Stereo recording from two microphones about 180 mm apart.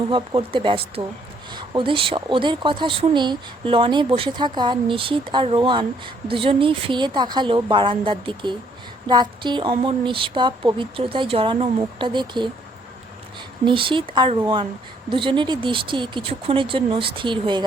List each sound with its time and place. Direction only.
0.1 s speech: 30° right (ahead or behind)
13.7 s speech: 30° right (ahead or behind)